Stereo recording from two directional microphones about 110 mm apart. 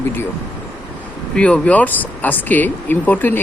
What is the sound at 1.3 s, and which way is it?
Speech, 10° left (ahead or behind).